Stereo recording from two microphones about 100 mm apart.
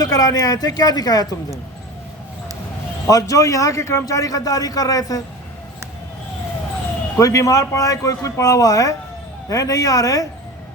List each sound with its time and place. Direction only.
0.0 s a man's voice: 40° left (ahead or behind)
3.1 s a man's voice: 35° left (ahead or behind)
7.2 s a man's voice: 35° left (ahead or behind)